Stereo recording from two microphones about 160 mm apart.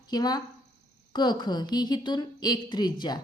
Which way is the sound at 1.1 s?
25° left (ahead or behind).